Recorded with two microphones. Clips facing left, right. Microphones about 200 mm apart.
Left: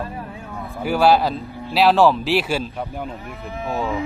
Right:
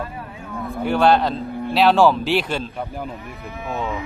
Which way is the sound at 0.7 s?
5° left (ahead or behind).